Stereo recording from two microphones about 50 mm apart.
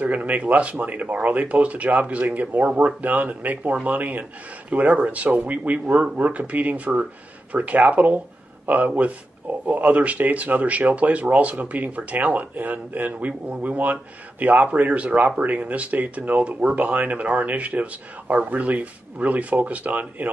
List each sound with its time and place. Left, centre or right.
0.0 s speech: right